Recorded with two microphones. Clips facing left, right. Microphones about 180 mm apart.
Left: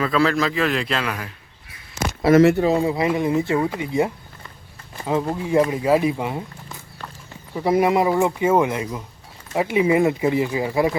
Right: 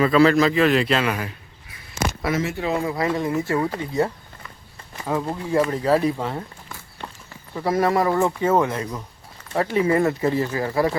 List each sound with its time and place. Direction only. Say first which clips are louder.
0.0 s a man's voice: right 4 dB; centre (ahead or behind)
2.3 s speech: left 15 dB; 65° left (ahead or behind)
2.6 s speech: left 5 dB; 35° left (ahead or behind)
2.8 s speech: left 3 dB; 15° left (ahead or behind)
5.3 s speech: left 2 dB; 15° left (ahead or behind)
7.5 s speech: left 2 dB; 15° left (ahead or behind)